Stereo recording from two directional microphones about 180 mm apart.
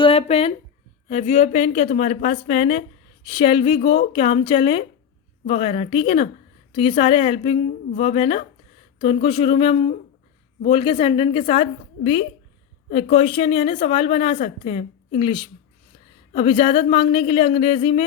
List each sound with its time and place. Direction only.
0.0 s a woman's voice: 30° left (ahead or behind)